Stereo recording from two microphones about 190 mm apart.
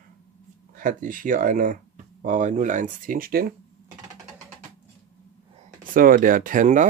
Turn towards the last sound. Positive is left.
turn(degrees=-40)  # may be behind; listen again after turning